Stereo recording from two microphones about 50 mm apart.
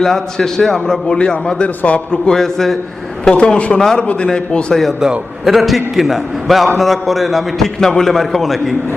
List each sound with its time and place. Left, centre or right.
0.0 s a man's voice: centre
1.8 s speech: left
2.3 s a man's voice: centre
3.2 s speech: left
3.8 s a man's voice: centre
4.0 s a man's voice: left
4.7 s a man's voice: centre